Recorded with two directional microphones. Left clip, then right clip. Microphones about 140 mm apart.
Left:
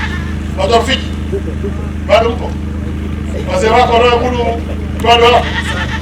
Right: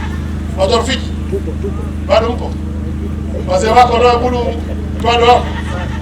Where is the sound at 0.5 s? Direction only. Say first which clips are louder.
Left 2 dB; 15° right (ahead or behind).